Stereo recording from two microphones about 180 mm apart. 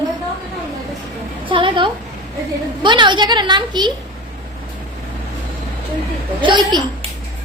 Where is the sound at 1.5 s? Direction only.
30° right (ahead or behind).